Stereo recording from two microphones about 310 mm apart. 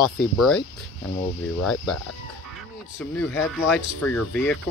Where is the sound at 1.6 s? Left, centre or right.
Left.